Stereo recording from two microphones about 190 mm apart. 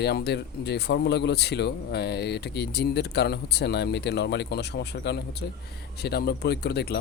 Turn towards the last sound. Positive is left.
turn(degrees=60)  # may be behind; listen again after turning